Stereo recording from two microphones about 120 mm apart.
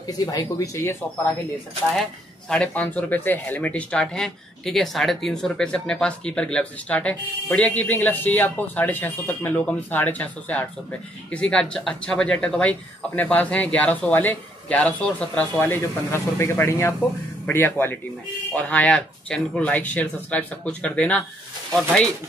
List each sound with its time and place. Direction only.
0.0 s speech: 30° left (ahead or behind)
2.5 s speech: 10° left (ahead or behind)